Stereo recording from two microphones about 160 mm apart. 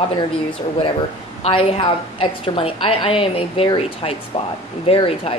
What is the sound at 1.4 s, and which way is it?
A woman's voice, 35° left (ahead or behind).